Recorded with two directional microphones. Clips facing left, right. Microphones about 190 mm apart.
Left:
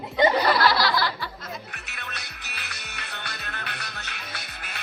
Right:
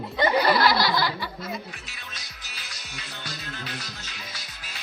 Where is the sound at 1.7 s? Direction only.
65° left (ahead or behind).